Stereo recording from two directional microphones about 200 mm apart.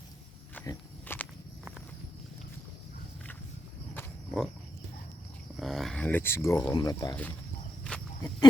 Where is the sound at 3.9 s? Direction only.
5° left (ahead or behind).